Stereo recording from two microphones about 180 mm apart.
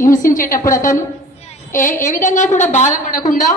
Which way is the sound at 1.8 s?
45° left (ahead or behind).